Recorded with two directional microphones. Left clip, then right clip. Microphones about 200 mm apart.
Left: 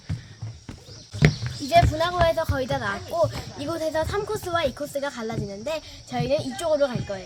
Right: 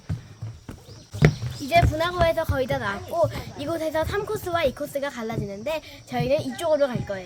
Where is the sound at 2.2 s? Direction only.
15° right (ahead or behind).